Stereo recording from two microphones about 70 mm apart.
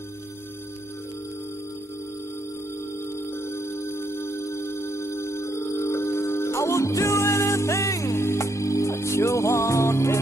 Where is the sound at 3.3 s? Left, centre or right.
Left.